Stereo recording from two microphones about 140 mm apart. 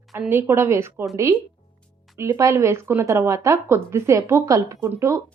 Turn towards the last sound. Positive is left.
turn(degrees=-20)  # may be behind; listen again after turning